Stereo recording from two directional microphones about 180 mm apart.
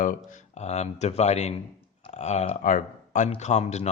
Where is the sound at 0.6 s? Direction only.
40° left (ahead or behind).